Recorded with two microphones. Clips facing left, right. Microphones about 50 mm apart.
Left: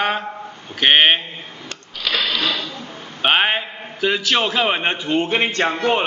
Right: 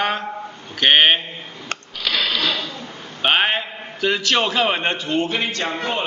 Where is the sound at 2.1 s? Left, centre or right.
Centre.